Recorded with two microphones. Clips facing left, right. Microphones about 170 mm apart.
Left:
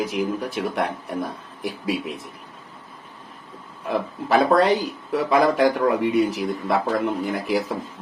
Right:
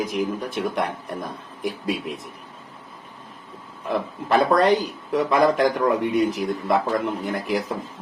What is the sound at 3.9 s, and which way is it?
Speech, 5° left (ahead or behind).